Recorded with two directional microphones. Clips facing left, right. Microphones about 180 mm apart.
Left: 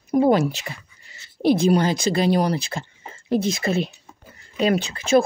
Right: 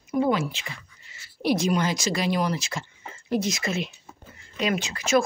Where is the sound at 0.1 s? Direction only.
40° left (ahead or behind).